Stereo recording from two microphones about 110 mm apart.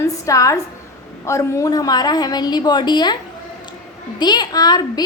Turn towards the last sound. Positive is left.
turn(degrees=40)  # may be behind; listen again after turning